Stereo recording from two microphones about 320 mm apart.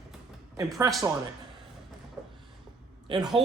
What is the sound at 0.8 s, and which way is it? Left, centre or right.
Speech, centre.